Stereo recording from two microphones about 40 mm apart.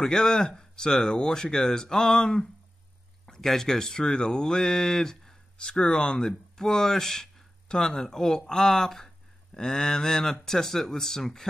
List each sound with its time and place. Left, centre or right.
0.0 s speech: centre